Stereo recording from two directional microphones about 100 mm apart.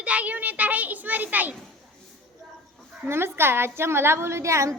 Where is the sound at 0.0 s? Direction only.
15° right (ahead or behind).